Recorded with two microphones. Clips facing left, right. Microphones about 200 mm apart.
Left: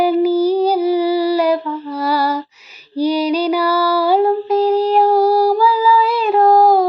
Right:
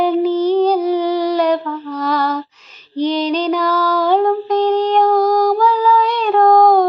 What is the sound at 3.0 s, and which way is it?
Female singing, 10° left (ahead or behind).